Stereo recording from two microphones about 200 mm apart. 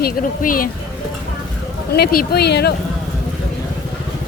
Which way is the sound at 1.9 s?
50° left (ahead or behind).